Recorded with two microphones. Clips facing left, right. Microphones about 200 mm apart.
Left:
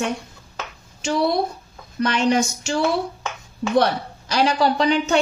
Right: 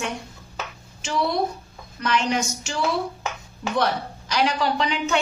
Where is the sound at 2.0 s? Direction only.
35° left (ahead or behind).